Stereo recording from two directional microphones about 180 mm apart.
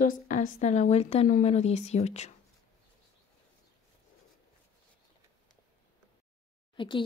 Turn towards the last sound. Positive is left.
turn(degrees=30)  # may be behind; listen again after turning